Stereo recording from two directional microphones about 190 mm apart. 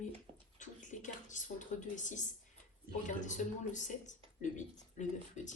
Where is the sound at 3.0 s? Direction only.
40° left (ahead or behind).